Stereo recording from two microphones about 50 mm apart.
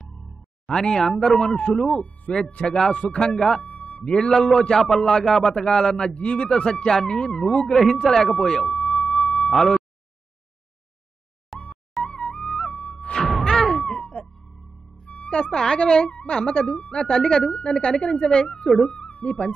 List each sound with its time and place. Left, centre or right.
0.7 s speech: centre
2.0 s a woman's voice: left
2.7 s speech: centre
3.6 s a man's voice: left
6.1 s speech: left; by 9.8 s centre
11.5 s music: centre
13.2 s music: centre
13.7 s cat: centre
13.9 s music: centre
15.0 s a woman's voice: left